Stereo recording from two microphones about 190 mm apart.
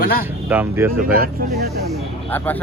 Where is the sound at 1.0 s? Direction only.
50° right (ahead or behind).